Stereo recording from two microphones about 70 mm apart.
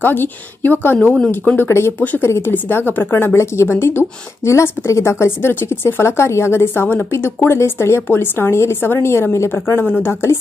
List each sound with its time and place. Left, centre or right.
0.0 s a woman's voice: left